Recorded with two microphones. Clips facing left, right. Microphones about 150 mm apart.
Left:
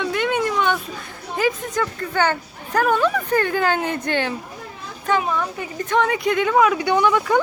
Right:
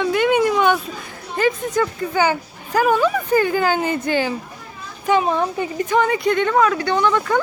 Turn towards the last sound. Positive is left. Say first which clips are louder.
# left 1 dB
turn(degrees=10)  # may be behind; listen again after turning